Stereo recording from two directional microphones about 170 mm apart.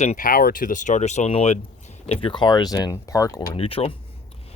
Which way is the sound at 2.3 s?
25° left (ahead or behind).